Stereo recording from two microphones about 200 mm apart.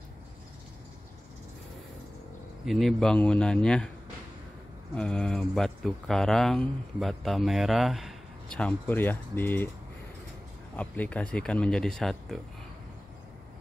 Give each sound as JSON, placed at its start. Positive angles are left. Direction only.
{"t": 2.6, "sound": "speech", "side_deg": 0}
{"t": 4.9, "sound": "speech", "side_deg": 5}
{"t": 10.8, "sound": "speech", "side_deg": 5}